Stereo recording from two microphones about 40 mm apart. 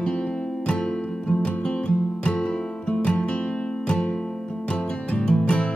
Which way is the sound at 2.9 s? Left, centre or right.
Left.